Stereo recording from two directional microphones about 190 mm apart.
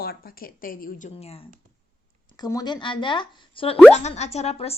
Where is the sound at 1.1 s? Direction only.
30° left (ahead or behind).